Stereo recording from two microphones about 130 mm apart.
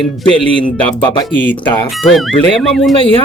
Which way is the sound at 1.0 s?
35° left (ahead or behind).